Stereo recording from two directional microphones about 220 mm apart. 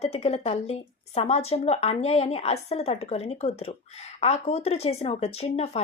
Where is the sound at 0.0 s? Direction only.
30° left (ahead or behind).